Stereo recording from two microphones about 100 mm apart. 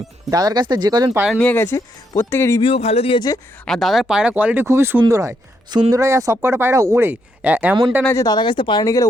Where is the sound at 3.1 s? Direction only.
40° left (ahead or behind).